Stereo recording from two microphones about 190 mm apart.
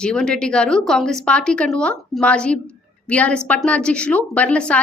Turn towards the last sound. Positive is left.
turn(degrees=5)  # may be behind; listen again after turning